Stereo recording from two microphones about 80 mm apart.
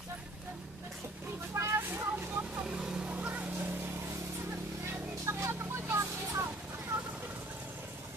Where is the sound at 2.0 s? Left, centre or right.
Right.